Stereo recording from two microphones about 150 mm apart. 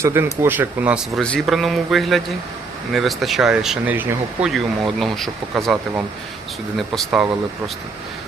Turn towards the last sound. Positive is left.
turn(degrees=0)  # may be behind; listen again after turning